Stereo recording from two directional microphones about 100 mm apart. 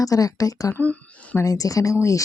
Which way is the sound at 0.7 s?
15° left (ahead or behind).